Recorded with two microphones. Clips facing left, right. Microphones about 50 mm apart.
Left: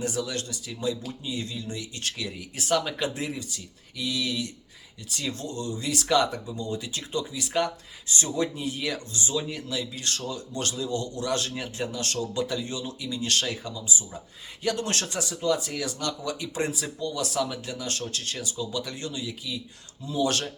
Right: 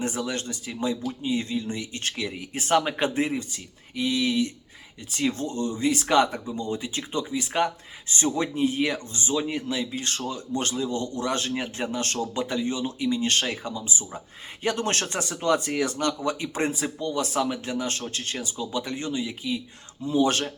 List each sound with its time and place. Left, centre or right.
0.2 s speech: right